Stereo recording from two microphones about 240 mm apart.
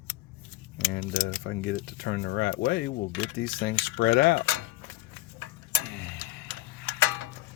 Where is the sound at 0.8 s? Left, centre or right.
Left.